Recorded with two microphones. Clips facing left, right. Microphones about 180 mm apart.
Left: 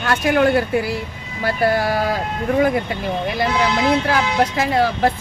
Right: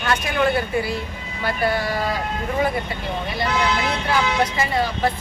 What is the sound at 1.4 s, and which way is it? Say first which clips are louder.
Speech: left 4 dB; 45° left (ahead or behind).